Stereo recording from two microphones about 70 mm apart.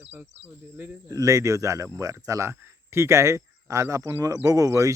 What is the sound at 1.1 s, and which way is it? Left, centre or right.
A man's voice, right.